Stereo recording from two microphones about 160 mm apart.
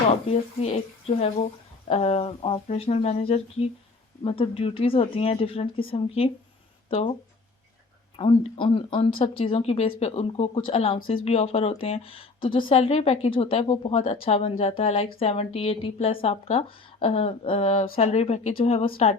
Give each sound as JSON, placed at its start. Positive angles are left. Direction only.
{"t": 0.6, "sound": "speech", "side_deg": 40}